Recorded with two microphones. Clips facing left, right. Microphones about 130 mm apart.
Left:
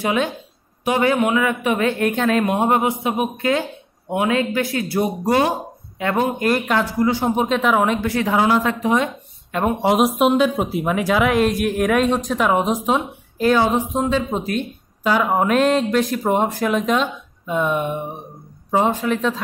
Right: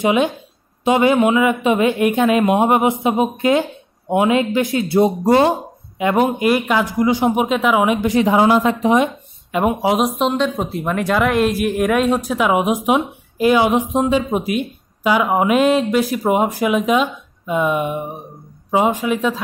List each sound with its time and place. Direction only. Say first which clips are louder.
0.0 s speech: right 4 dB; 20° right (ahead or behind)